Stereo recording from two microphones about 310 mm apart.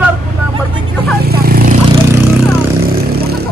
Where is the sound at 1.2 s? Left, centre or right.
Right.